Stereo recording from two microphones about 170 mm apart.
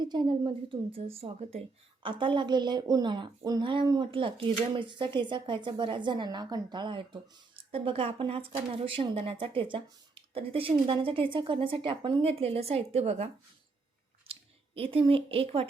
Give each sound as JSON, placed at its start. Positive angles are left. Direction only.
{"t": 0.0, "sound": "a woman's voice", "side_deg": -25}
{"t": 14.8, "sound": "a woman's voice", "side_deg": -30}